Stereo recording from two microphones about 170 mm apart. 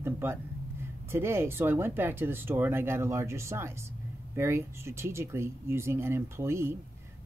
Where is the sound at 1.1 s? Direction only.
15° right (ahead or behind).